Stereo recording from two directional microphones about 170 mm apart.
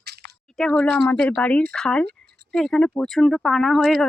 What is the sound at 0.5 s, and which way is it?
Speech, 5° left (ahead or behind).